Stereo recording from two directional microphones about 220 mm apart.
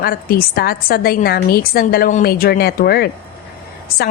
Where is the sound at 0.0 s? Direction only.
45° left (ahead or behind).